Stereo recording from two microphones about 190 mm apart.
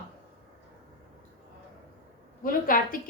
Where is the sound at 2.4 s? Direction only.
50° left (ahead or behind).